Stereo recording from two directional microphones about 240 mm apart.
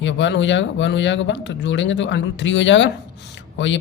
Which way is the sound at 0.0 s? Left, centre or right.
Left.